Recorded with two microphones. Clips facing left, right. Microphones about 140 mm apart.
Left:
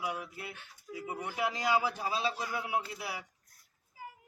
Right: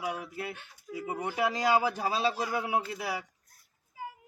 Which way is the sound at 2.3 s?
70° right (ahead or behind).